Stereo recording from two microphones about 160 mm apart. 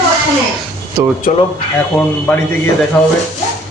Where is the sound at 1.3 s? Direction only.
65° left (ahead or behind).